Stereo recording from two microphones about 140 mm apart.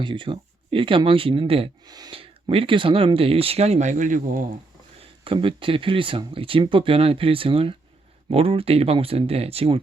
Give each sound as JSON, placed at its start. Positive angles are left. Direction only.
{"t": 0.0, "sound": "speech", "side_deg": -35}
{"t": 1.9, "sound": "speech", "side_deg": -30}
{"t": 5.2, "sound": "speech", "side_deg": -40}